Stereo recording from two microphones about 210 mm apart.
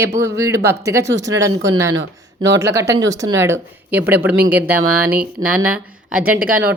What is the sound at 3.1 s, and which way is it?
Speech, 15° right (ahead or behind).